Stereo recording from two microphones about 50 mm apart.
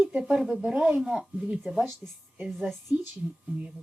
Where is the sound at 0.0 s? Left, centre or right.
Right.